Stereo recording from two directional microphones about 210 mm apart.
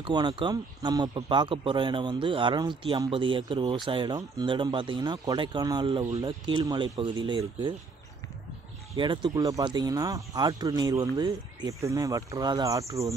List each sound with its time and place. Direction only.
0.0 s speech: 20° right (ahead or behind)
8.9 s speech: 20° right (ahead or behind)